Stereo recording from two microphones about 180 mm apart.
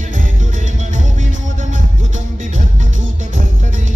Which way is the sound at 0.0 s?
45° right (ahead or behind).